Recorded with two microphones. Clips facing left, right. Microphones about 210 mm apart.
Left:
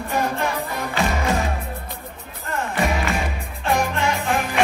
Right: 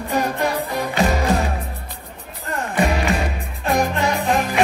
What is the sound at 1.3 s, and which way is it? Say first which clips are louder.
Music: right 3 dB; 35° right (ahead or behind).